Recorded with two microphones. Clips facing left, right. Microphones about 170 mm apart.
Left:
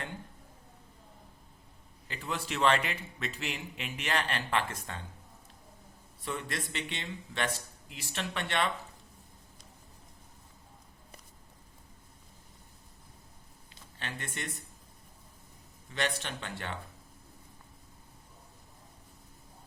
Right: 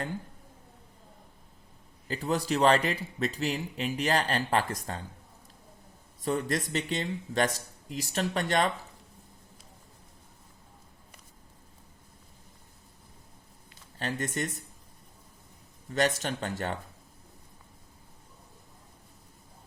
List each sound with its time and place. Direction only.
2.0 s speech: 40° right (ahead or behind)
6.2 s speech: 40° right (ahead or behind)
14.0 s speech: 40° right (ahead or behind)
15.9 s speech: 45° right (ahead or behind)